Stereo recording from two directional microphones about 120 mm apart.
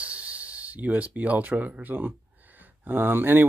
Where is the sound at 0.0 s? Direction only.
10° right (ahead or behind).